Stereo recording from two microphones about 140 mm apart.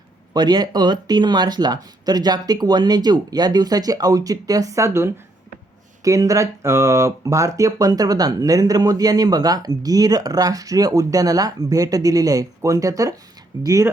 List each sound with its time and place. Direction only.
0.3 s speech: 30° right (ahead or behind)